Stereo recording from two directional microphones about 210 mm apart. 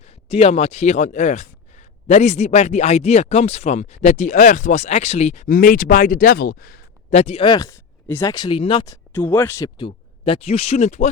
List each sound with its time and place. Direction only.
0.3 s speech: 30° left (ahead or behind)